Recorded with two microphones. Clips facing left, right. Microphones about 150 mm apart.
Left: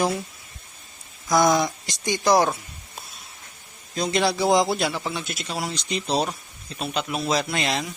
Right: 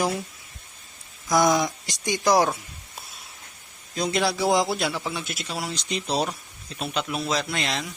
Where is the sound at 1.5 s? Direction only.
10° right (ahead or behind).